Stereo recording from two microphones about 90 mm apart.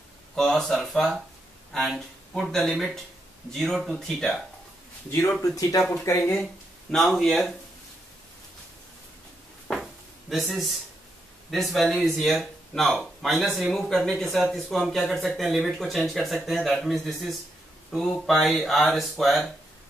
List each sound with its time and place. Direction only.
0.4 s speech: 5° left (ahead or behind)
5.4 s speech: 40° left (ahead or behind)
6.9 s speech: 5° left (ahead or behind)
10.5 s speech: centre (ahead or behind)